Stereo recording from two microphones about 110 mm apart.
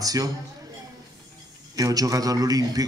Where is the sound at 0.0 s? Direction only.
35° right (ahead or behind).